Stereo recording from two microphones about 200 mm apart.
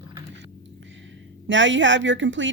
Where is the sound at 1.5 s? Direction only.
65° right (ahead or behind).